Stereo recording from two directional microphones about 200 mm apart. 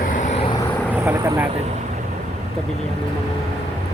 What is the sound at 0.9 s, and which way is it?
Speech, 10° right (ahead or behind).